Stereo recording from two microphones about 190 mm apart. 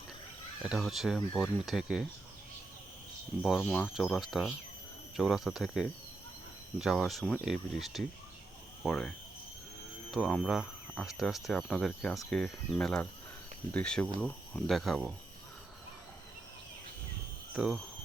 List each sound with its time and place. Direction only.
0.6 s speech: centre (ahead or behind)
3.4 s speech: centre (ahead or behind)
17.5 s speech: 5° right (ahead or behind)